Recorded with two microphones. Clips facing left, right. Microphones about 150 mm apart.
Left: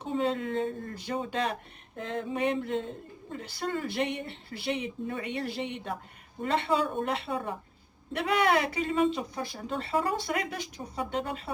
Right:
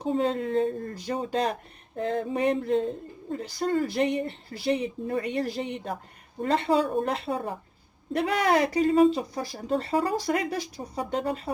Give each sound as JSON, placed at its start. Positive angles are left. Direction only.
{"t": 0.0, "sound": "speech", "side_deg": -40}